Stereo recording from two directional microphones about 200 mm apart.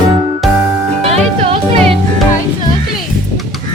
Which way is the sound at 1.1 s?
30° right (ahead or behind).